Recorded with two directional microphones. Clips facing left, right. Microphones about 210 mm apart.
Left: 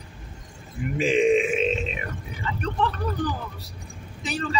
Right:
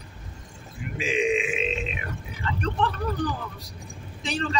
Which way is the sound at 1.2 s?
45° left (ahead or behind).